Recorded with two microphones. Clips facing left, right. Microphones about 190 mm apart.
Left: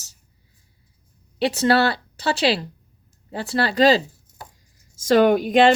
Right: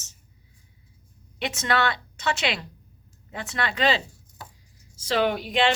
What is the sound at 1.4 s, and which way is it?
Speech, 35° left (ahead or behind).